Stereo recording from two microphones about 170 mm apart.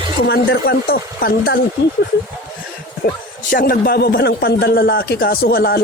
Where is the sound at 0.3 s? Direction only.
80° left.